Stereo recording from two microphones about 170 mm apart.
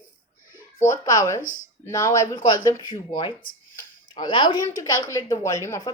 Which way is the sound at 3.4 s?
55° left (ahead or behind).